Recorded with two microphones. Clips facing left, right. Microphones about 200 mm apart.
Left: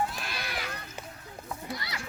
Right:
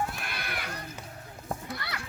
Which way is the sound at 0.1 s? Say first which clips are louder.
Even; 55° right (ahead or behind).